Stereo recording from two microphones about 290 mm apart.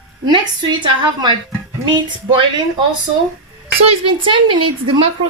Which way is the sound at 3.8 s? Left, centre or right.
Centre.